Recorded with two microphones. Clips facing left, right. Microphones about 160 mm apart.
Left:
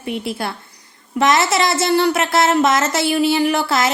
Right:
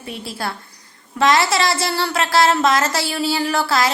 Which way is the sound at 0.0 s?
20° left (ahead or behind).